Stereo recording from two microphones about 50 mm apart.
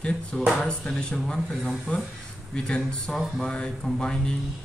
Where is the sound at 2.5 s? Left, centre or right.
Centre.